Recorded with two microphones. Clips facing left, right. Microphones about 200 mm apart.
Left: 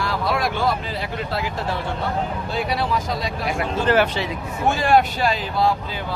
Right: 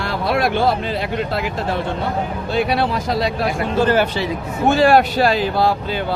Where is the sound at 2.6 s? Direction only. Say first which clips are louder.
Right 5 dB; 65° right (ahead or behind).